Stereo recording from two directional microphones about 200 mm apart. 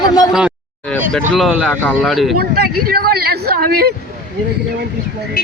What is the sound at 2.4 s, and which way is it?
A woman's voice, 50° right (ahead or behind).